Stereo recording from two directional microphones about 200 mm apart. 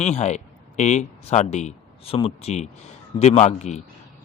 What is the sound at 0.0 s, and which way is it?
A man's voice, 35° left (ahead or behind).